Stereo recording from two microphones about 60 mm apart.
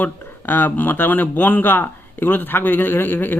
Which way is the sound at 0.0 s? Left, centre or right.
Left.